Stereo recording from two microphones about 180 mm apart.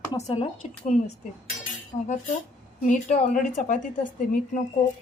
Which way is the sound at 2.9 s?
45° left (ahead or behind).